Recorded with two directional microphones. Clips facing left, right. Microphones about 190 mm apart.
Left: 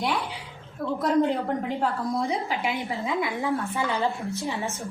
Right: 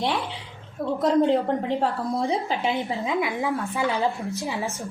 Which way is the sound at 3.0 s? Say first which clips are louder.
Right 2 dB; 15° right (ahead or behind).